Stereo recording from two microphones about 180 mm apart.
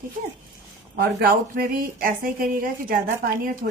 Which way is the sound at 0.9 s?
60° right (ahead or behind).